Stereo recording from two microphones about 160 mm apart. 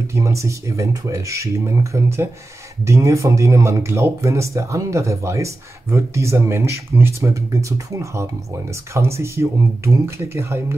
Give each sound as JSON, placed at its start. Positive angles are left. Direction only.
{"t": 0.1, "sound": "speech", "side_deg": -20}